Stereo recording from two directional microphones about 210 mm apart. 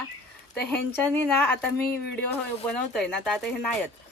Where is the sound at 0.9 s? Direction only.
10° left (ahead or behind).